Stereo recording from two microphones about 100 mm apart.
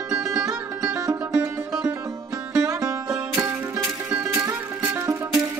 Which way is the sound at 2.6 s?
35° right (ahead or behind).